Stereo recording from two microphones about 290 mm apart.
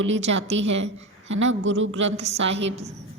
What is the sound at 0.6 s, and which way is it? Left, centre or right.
Speech, right.